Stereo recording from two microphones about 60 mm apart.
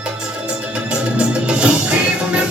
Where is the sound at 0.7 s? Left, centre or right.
Centre.